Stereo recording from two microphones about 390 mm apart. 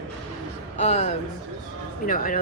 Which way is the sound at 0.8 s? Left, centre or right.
Centre.